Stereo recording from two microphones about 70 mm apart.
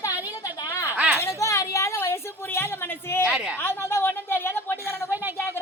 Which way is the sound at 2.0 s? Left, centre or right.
Left.